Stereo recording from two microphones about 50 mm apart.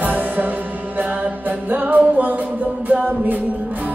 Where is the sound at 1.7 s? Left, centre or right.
Right.